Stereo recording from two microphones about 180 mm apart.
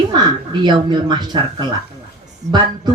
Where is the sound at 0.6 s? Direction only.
25° right (ahead or behind).